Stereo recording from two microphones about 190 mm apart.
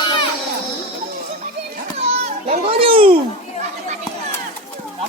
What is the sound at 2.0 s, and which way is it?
Children playing, 30° right (ahead or behind).